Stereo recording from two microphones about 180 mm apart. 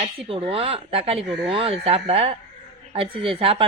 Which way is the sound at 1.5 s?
30° right (ahead or behind).